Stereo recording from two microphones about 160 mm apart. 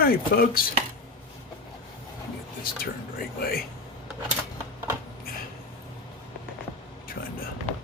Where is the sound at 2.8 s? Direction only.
70° left (ahead or behind).